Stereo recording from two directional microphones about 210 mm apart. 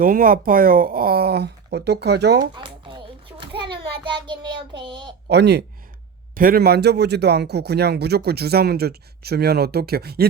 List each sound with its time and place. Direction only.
0.0 s a man's voice: 40° right (ahead or behind)
2.6 s a sound: 25° right (ahead or behind)
5.3 s a man's voice: 55° right (ahead or behind)